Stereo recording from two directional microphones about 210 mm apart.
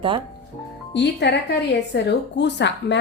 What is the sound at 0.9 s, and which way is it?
A woman's voice, 55° left (ahead or behind).